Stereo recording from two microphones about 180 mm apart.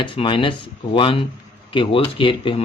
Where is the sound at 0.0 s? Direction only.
25° left (ahead or behind).